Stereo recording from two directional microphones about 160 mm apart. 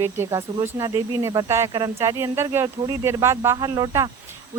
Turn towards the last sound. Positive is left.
turn(degrees=-25)  # may be behind; listen again after turning